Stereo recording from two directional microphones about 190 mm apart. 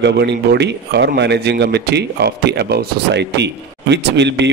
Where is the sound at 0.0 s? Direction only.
60° right (ahead or behind).